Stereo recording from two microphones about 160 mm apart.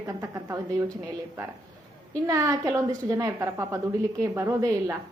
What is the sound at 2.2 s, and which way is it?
A woman's voice, 20° right (ahead or behind).